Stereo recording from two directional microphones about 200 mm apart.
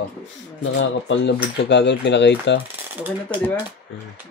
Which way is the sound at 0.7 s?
60° left (ahead or behind).